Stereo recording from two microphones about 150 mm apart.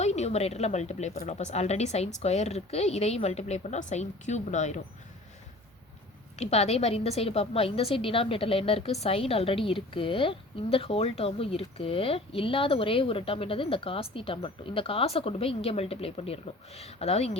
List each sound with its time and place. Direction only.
0.0 s speech: 50° left (ahead or behind)
6.3 s a woman's voice: 45° left (ahead or behind)